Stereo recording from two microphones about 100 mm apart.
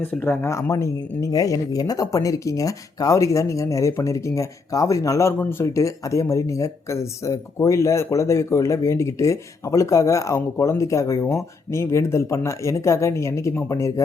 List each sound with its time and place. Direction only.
0.0 s speech: 20° left (ahead or behind)